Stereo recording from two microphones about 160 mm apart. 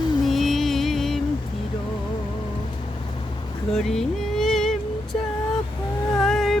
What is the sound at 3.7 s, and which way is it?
Vehicle, 5° left (ahead or behind).